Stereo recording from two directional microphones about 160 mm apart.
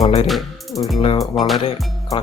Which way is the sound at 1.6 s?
35° left (ahead or behind).